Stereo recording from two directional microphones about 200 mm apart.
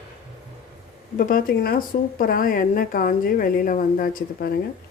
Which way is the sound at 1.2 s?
45° left (ahead or behind).